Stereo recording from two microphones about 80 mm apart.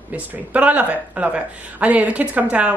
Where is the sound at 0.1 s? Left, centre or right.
Centre.